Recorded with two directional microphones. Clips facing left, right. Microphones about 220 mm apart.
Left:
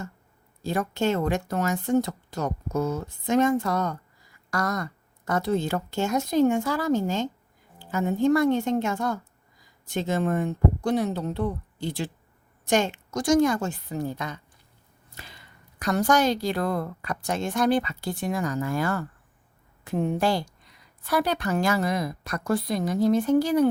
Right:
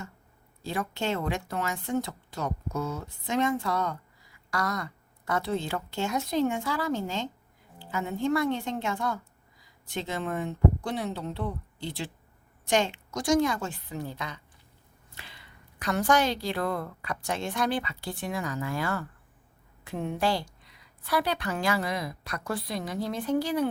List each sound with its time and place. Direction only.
0.6 s a woman's voice: 45° left (ahead or behind)